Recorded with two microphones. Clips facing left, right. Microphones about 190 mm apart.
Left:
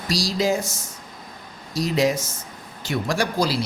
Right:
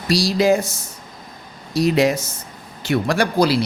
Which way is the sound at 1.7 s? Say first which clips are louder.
Right 4 dB; 65° right (ahead or behind).